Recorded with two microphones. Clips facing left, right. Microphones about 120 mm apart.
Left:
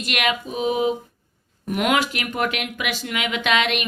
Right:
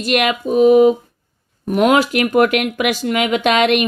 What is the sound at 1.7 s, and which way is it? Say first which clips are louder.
Speech: right 7 dB; 35° right (ahead or behind).